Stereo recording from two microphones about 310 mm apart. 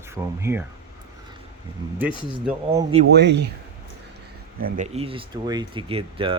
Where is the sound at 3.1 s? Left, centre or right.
Right.